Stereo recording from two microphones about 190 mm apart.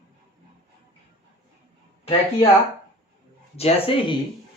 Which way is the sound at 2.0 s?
35° left (ahead or behind).